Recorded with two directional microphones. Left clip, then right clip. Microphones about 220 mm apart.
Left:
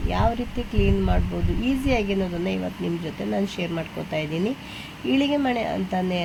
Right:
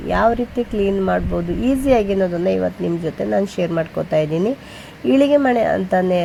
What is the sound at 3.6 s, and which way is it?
Speech, 25° right (ahead or behind).